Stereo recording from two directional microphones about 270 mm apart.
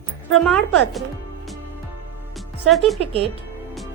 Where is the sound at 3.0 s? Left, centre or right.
Right.